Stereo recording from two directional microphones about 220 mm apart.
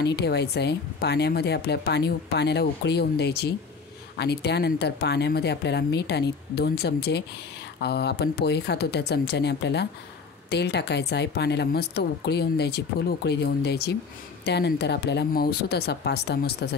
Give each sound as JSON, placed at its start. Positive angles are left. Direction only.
{"t": 0.0, "sound": "speech", "side_deg": 50}